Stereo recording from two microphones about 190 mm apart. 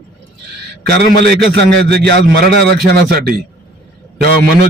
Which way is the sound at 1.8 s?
60° right (ahead or behind).